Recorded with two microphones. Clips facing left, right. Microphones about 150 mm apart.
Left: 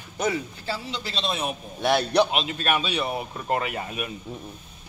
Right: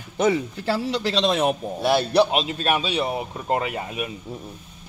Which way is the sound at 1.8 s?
5° right (ahead or behind).